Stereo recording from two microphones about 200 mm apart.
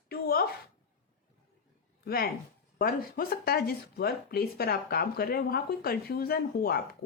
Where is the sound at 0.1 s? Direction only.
50° left (ahead or behind).